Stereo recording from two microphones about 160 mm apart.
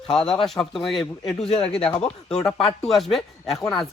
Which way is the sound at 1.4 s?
40° left (ahead or behind).